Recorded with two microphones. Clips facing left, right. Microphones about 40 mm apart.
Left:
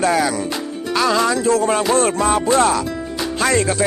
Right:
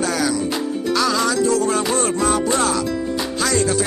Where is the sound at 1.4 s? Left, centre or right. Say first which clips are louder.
Left 2 dB; left.